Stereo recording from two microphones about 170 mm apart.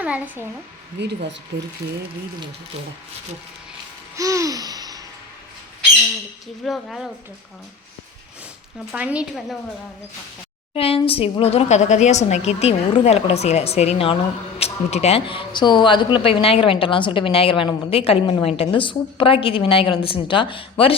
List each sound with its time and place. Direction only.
0.0 s a child's voice: 10° right (ahead or behind)
0.9 s speech: 90° right
4.2 s laughter: 20° right (ahead or behind)
6.7 s speech: centre (ahead or behind)
8.9 s speech: 5° right (ahead or behind)
10.8 s speech: 35° left (ahead or behind)